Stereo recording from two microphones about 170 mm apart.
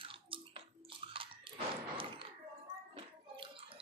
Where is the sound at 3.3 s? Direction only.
30° right (ahead or behind).